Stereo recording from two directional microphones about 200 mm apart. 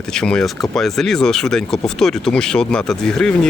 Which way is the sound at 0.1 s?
5° left (ahead or behind).